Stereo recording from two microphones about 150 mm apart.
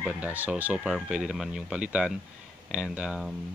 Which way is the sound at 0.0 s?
10° right (ahead or behind).